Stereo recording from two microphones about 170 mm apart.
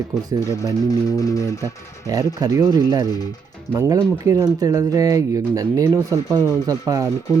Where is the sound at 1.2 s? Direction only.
20° left (ahead or behind).